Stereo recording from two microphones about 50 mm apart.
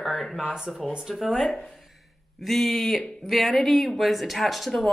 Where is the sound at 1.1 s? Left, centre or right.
Centre.